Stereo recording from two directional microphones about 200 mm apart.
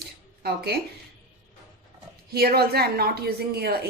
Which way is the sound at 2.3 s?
50° right (ahead or behind).